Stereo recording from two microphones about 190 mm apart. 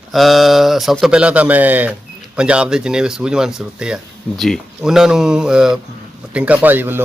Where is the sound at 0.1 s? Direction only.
Centre (ahead or behind).